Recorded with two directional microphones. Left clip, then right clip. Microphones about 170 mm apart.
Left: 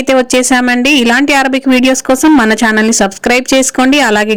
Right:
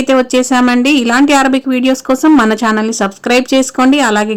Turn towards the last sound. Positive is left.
turn(degrees=15)  # may be behind; listen again after turning